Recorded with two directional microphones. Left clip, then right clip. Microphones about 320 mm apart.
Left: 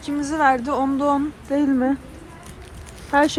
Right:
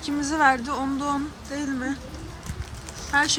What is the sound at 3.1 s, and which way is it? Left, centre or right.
Speech, centre.